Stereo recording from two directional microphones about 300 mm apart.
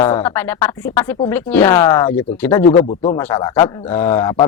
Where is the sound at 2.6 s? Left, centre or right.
Centre.